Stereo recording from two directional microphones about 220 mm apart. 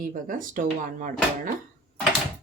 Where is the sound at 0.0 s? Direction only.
40° right (ahead or behind).